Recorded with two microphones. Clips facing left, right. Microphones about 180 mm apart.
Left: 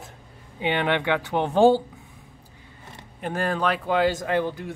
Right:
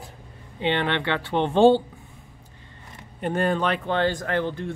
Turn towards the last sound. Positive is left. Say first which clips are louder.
# left 1 dB
turn(degrees=10)  # may be behind; listen again after turning